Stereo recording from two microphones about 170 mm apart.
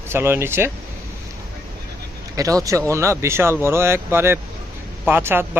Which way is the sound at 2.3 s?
20° right (ahead or behind).